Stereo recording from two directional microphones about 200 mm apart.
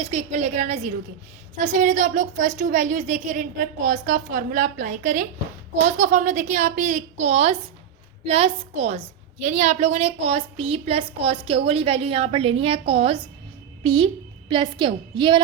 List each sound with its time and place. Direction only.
0.0 s a woman's voice: 35° right (ahead or behind)